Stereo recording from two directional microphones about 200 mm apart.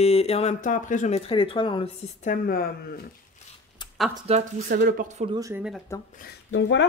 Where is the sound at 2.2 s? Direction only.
45° left (ahead or behind).